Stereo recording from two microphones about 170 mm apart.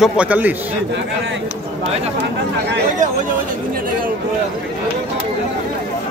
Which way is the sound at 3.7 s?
55° right (ahead or behind).